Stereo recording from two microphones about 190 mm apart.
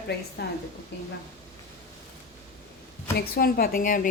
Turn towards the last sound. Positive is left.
turn(degrees=45)  # may be behind; listen again after turning